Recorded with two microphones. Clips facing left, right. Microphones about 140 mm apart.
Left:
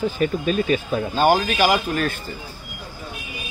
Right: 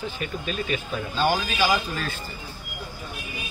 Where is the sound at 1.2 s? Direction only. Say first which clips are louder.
Left 5 dB; 50° left (ahead or behind).